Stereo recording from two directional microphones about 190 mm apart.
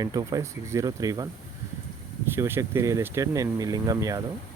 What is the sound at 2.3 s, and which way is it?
Speech, 15° right (ahead or behind).